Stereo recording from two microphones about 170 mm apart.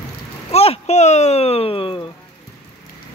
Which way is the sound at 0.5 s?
35° left (ahead or behind).